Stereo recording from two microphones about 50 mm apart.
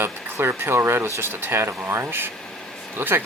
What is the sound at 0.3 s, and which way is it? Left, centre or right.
Speech, right.